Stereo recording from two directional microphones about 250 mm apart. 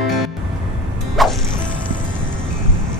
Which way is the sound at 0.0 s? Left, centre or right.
Centre.